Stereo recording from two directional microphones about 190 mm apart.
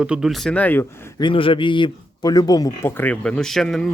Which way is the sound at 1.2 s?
25° left (ahead or behind).